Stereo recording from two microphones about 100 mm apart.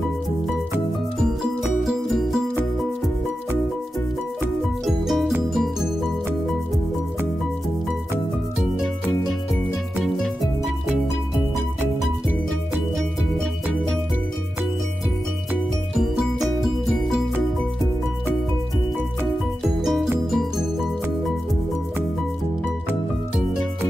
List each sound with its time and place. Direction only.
1.6 s music: centre (ahead or behind)
4.8 s music: centre (ahead or behind)
9.3 s music: centre (ahead or behind)
16.6 s music: 5° right (ahead or behind)
19.6 s music: centre (ahead or behind)